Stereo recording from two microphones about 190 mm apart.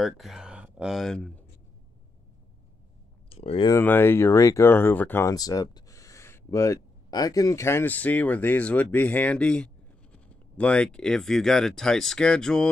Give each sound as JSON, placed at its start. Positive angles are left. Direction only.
{"t": 0.0, "sound": "speech", "side_deg": 0}
{"t": 3.3, "sound": "a sound", "side_deg": 30}
{"t": 3.7, "sound": "speech", "side_deg": 10}